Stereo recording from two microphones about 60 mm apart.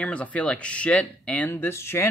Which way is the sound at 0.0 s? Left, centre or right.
Left.